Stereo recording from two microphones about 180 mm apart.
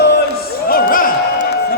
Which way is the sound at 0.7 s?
55° left (ahead or behind).